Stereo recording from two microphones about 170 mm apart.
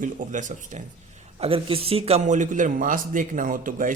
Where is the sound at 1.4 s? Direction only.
35° right (ahead or behind).